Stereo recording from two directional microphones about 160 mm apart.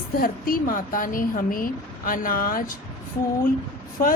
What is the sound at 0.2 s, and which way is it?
A woman's voice, 65° left (ahead or behind).